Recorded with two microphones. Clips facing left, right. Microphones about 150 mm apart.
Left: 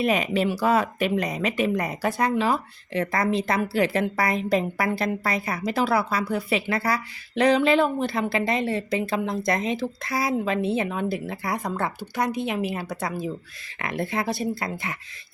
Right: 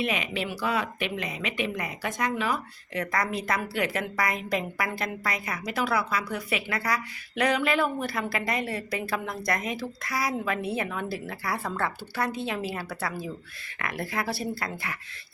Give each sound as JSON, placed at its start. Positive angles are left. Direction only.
{"t": 0.0, "sound": "speech", "side_deg": 40}